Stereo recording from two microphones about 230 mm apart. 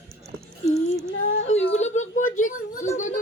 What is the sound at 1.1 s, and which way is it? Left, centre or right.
Speech, left.